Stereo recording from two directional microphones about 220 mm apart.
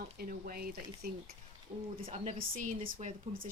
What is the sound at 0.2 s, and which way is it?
Speech, 40° right (ahead or behind).